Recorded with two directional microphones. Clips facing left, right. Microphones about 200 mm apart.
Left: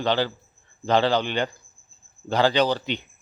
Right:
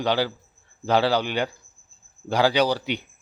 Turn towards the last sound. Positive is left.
turn(degrees=-10)  # may be behind; listen again after turning